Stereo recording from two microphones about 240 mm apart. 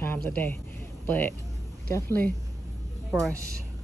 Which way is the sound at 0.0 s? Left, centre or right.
Centre.